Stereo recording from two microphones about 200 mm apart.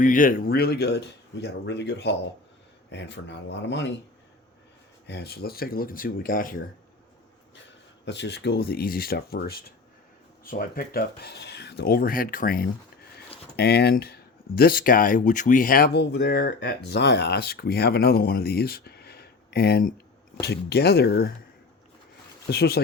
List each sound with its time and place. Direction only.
0.0 s speech: 40° left (ahead or behind); by 3.8 s 60° left (ahead or behind)
5.0 s speech: 55° left (ahead or behind)
8.0 s speech: 60° left (ahead or behind)
22.4 s speech: 55° left (ahead or behind)